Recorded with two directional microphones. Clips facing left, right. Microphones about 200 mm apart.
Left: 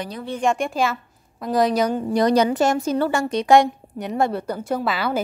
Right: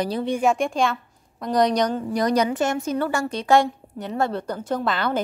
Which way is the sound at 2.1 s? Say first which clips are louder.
Left 5 dB; 30° left (ahead or behind).